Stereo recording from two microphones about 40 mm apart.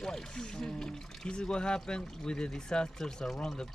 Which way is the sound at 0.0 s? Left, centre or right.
Centre.